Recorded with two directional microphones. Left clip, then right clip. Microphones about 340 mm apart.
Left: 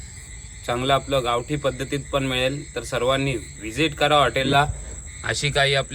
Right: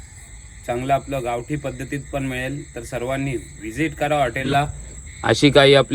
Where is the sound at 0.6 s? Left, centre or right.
Centre.